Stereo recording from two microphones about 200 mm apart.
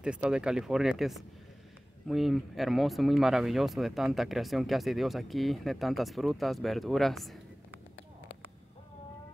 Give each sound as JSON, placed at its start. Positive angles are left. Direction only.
{"t": 0.0, "sound": "speech", "side_deg": -5}